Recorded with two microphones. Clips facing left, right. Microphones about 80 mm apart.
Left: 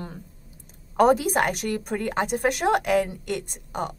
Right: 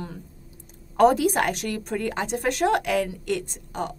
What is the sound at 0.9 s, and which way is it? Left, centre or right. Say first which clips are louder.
A woman's voice: right 1 dB; centre.